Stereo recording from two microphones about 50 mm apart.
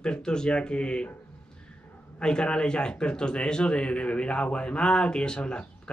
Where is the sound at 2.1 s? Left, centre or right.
Centre.